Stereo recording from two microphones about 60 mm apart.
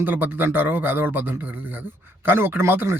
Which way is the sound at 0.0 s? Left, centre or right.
Right.